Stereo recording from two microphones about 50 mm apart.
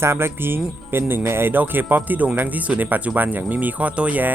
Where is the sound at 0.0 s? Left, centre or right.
Right.